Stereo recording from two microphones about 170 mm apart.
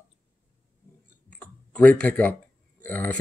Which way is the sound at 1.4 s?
5° left (ahead or behind).